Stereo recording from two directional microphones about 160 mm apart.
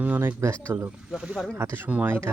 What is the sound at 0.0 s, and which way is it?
Speech, 10° right (ahead or behind).